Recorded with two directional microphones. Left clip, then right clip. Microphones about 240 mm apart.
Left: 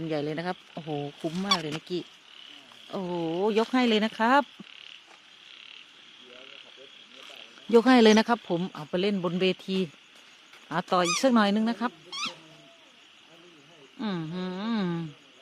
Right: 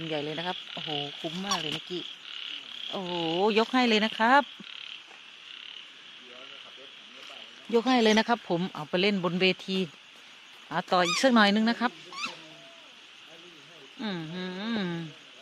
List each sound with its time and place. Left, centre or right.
0.1 s speech: left
3.0 s speech: centre
7.7 s speech: left; by 12.3 s centre
14.0 s speech: left